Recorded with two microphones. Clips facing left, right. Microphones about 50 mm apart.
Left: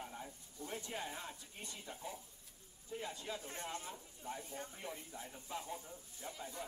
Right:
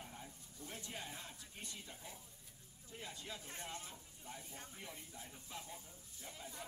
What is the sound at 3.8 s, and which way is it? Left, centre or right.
Speech, centre.